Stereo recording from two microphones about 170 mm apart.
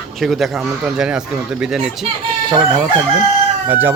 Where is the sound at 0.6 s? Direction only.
15° right (ahead or behind).